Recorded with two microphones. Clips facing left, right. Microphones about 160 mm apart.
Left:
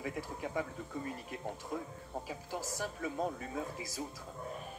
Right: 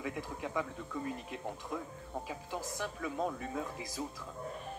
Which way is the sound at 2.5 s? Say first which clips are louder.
Even; 40° left (ahead or behind).